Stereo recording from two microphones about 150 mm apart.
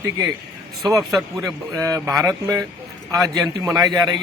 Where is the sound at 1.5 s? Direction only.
20° right (ahead or behind).